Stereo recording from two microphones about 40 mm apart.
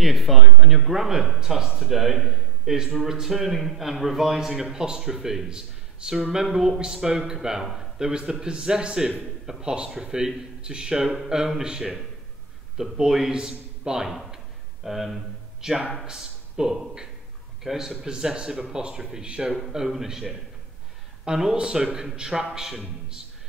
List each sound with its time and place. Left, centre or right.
0.0 s a man's voice: centre
14.9 s a man's voice: centre; by 19.6 s right
19.9 s a man's voice: centre
21.3 s a man's voice: centre